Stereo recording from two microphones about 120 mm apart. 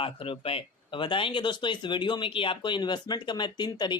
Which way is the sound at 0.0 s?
50° left (ahead or behind).